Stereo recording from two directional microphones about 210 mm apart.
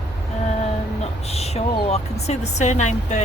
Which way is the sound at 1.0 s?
30° left (ahead or behind).